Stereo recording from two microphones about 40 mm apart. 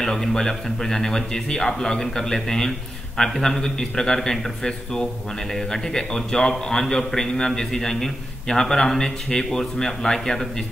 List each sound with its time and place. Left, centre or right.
0.0 s a man's voice: centre